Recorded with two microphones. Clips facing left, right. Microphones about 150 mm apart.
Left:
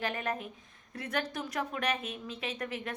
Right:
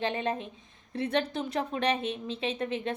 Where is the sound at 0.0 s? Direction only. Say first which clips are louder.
Right 4 dB; 25° right (ahead or behind).